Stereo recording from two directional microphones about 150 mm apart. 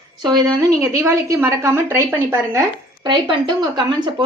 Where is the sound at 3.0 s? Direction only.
30° right (ahead or behind).